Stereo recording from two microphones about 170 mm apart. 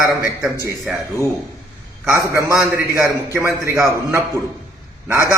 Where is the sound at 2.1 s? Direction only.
15° right (ahead or behind).